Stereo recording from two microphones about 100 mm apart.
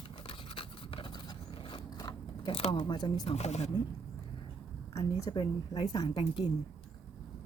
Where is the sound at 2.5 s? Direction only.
70° left (ahead or behind).